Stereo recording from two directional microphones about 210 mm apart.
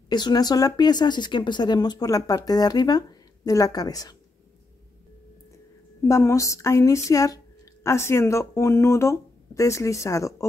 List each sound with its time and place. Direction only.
0.1 s speech: 20° left (ahead or behind)
6.0 s speech: 15° left (ahead or behind)